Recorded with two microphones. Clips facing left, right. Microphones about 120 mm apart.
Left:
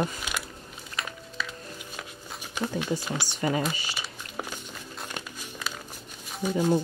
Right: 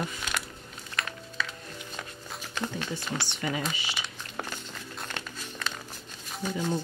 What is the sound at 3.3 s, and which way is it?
Speech, 40° left (ahead or behind).